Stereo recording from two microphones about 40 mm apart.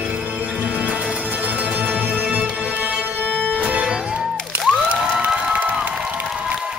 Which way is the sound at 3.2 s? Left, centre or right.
Left.